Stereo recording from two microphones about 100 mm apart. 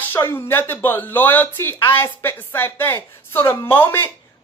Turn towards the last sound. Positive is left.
turn(degrees=20)  # may be behind; listen again after turning